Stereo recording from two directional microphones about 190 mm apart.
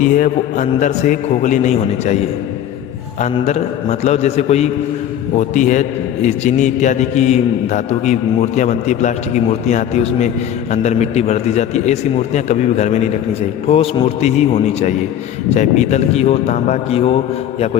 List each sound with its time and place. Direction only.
0.0 s a man's voice: 45° left (ahead or behind)